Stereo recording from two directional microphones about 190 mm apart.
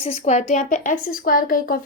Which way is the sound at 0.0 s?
35° left (ahead or behind).